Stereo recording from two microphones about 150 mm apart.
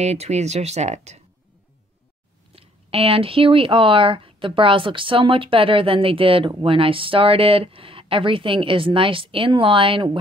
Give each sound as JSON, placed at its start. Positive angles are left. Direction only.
{"t": 0.0, "sound": "speech", "side_deg": -45}
{"t": 2.5, "sound": "speech", "side_deg": -40}